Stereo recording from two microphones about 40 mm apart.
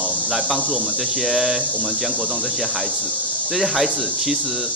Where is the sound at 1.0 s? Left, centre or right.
Centre.